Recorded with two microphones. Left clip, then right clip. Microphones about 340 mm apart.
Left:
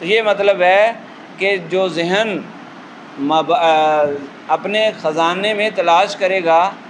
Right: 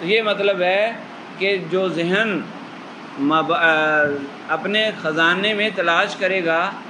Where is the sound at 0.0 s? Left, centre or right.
Centre.